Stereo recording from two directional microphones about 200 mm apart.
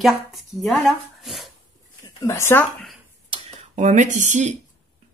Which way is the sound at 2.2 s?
15° left (ahead or behind).